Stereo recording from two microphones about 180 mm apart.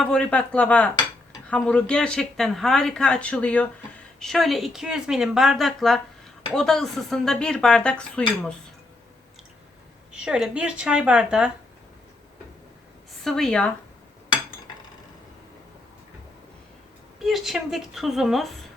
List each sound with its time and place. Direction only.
0.0 s speech: 5° left (ahead or behind)
10.1 s speech: 5° right (ahead or behind)
13.2 s speech: 5° left (ahead or behind)
17.2 s speech: centre (ahead or behind)